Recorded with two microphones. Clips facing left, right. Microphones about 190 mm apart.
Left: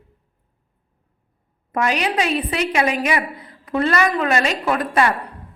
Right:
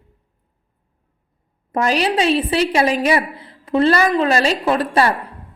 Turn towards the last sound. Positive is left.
turn(degrees=-30)  # may be behind; listen again after turning